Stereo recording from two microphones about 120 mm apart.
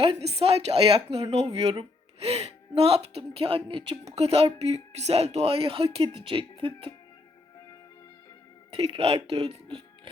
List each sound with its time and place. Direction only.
0.0 s speech: 55° right (ahead or behind)
4.0 s speech: 60° right (ahead or behind)
8.7 s speech: 55° right (ahead or behind)
9.6 s music: 45° right (ahead or behind)